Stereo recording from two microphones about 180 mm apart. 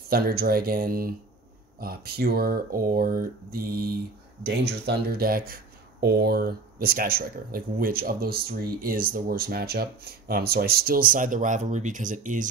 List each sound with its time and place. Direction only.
0.1 s speech: 60° right (ahead or behind)
4.4 s speech: 65° right (ahead or behind); by 12.4 s 45° right (ahead or behind)